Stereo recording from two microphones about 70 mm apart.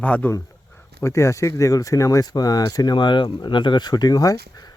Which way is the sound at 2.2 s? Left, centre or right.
Left.